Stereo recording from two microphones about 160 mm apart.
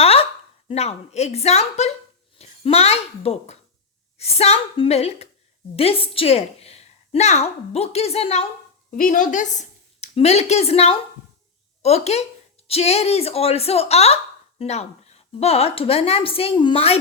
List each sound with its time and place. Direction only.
0.0 s a sound: 40° left (ahead or behind)
0.7 s a child's voice: 40° left (ahead or behind)
8.9 s a woman's voice: 55° left (ahead or behind); by 17.0 s 40° left (ahead or behind)